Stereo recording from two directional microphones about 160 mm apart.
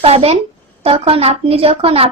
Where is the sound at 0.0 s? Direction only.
40° right (ahead or behind).